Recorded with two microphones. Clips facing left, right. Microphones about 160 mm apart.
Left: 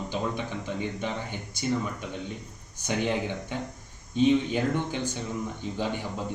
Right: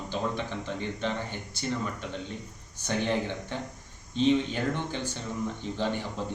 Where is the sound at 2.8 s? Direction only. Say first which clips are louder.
Left 1 dB; 15° left (ahead or behind).